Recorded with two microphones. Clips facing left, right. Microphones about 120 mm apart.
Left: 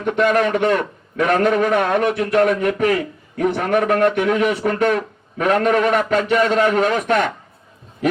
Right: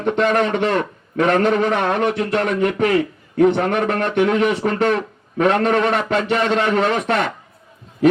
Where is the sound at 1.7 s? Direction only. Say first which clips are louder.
Left 1 dB; 40° left (ahead or behind).